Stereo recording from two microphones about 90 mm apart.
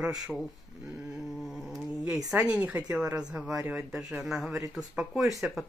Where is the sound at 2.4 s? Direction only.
15° right (ahead or behind).